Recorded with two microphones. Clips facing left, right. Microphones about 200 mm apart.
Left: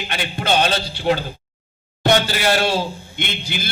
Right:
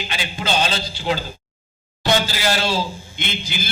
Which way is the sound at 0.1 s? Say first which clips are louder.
Left 4 dB; 60° left (ahead or behind).